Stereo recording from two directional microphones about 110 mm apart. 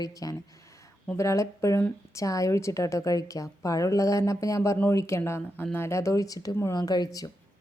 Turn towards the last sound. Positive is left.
turn(degrees=40)  # may be behind; listen again after turning